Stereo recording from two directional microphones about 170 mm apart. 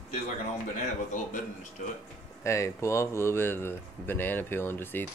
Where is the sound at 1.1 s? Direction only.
45° left (ahead or behind).